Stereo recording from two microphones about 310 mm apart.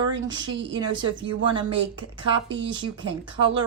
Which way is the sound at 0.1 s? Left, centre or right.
Centre.